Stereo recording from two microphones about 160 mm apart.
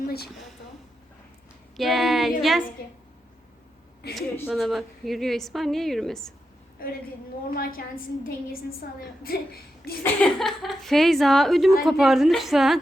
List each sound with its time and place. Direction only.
0.0 s a woman's voice: 75° left (ahead or behind)
1.7 s a woman's voice: centre (ahead or behind)
4.0 s a woman's voice: 90° left
4.4 s a woman's voice: centre (ahead or behind)
6.8 s a woman's voice: 65° left (ahead or behind)
10.0 s a woman's voice: 5° left (ahead or behind)